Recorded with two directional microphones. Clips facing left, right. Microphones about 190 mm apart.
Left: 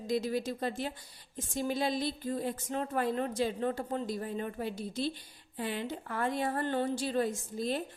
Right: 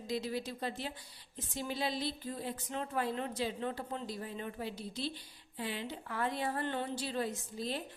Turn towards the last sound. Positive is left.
turn(degrees=50)  # may be behind; listen again after turning